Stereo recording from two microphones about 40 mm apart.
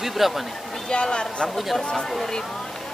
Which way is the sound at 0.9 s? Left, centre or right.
Left.